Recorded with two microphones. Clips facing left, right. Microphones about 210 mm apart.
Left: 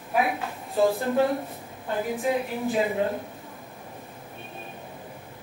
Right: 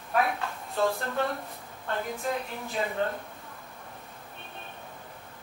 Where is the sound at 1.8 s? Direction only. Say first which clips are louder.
Left 5 dB; 10° left (ahead or behind).